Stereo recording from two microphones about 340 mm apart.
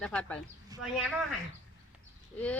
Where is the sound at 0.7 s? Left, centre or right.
Centre.